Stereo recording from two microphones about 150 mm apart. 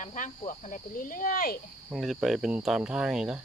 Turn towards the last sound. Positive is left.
turn(degrees=-5)  # may be behind; listen again after turning